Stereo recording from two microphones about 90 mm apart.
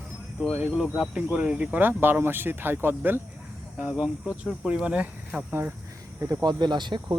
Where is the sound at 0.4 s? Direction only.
10° right (ahead or behind).